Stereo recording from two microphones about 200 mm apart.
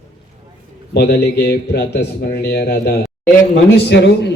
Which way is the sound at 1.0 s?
55° left (ahead or behind).